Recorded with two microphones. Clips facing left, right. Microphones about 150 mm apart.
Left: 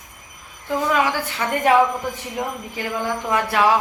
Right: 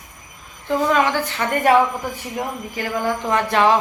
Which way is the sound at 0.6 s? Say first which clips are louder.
Right 2 dB; 10° left (ahead or behind).